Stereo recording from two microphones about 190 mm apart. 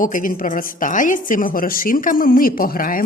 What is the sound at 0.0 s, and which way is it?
A woman's voice, 45° left (ahead or behind).